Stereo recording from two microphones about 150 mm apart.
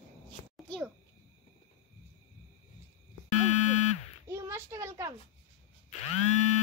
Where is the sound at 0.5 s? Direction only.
5° left (ahead or behind).